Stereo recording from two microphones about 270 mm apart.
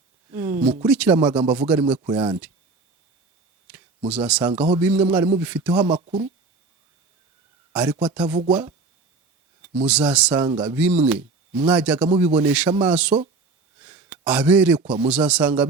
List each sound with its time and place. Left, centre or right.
0.3 s a sound: centre
0.9 s speech: centre
4.1 s speech: centre
5.9 s speech: right
7.7 s speech: centre
9.8 s a man's voice: centre